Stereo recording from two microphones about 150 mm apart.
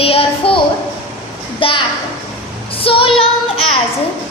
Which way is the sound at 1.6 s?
35° left (ahead or behind).